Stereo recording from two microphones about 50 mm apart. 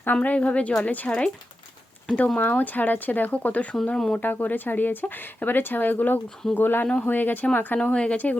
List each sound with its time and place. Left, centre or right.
0.0 s speech: left
3.8 s speech: centre
4.2 s speech: left
7.9 s speech: centre